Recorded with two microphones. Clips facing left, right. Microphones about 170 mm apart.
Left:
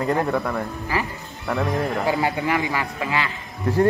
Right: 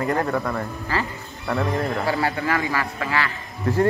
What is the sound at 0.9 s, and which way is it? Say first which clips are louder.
Speech: even; 15° left (ahead or behind).